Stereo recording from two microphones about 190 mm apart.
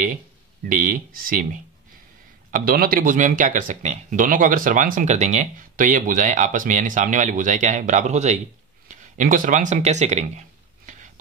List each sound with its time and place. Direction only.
0.7 s speech: 45° right (ahead or behind)